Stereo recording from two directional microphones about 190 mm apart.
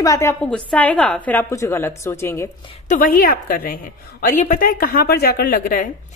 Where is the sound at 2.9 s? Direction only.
50° left (ahead or behind).